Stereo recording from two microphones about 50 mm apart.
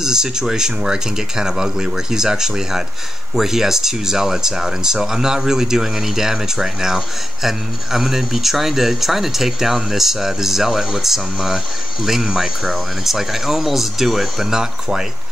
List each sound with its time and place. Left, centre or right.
0.0 s speech: centre